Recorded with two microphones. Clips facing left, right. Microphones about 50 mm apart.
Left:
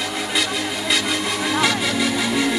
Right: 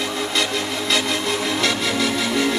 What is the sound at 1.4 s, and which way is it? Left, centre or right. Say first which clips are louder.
Music: left 4 dB; centre.